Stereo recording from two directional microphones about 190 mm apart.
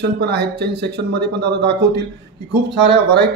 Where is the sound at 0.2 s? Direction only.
60° right (ahead or behind).